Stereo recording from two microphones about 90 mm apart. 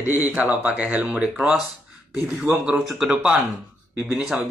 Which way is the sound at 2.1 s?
5° right (ahead or behind).